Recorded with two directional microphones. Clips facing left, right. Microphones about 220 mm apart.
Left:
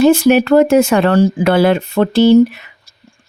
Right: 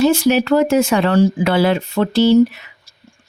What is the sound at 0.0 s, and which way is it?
Speech, 55° left (ahead or behind).